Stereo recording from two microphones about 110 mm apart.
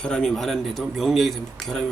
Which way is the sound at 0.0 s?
5° left (ahead or behind).